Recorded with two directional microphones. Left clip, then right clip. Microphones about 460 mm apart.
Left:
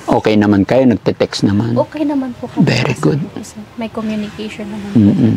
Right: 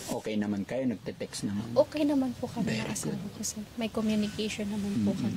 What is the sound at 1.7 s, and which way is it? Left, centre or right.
Speech, right.